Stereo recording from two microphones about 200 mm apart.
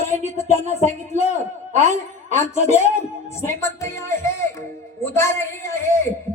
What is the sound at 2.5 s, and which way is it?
Speech, 30° left (ahead or behind).